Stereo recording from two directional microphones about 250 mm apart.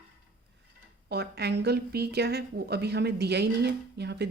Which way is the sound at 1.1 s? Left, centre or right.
Right.